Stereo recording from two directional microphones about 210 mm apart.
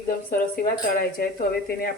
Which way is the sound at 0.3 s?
45° left (ahead or behind).